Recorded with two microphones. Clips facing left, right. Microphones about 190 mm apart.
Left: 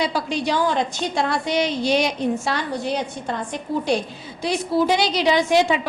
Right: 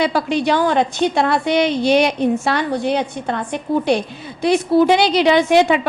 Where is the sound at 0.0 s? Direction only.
60° right (ahead or behind).